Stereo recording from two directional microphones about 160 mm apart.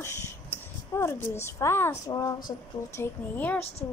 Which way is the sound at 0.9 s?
15° left (ahead or behind).